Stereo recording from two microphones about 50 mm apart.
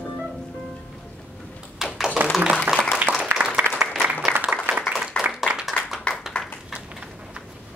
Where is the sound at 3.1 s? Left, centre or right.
Right.